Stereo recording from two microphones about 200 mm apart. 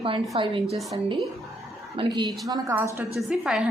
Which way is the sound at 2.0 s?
20° right (ahead or behind).